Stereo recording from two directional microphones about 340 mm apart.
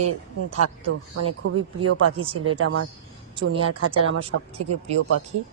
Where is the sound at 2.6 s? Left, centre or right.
Right.